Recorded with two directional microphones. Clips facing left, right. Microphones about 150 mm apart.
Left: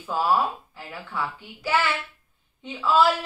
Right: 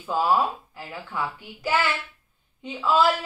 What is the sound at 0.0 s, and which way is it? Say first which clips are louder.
A woman's voice: right 1 dB; 20° right (ahead or behind).